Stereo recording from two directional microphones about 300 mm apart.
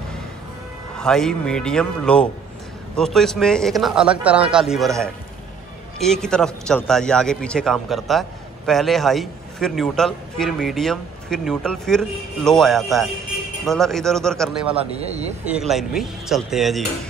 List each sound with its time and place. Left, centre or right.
0.9 s a man's voice: centre
14.9 s speech: right
15.7 s a man's voice: centre